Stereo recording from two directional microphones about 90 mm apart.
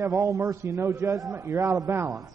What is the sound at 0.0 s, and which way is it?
A man's voice, 35° right (ahead or behind).